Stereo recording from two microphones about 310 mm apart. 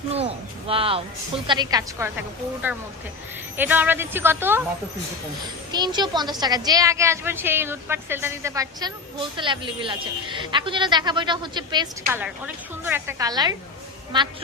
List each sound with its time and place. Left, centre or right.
0.1 s a woman's voice: centre
3.6 s a woman's voice: centre
5.7 s a woman's voice: centre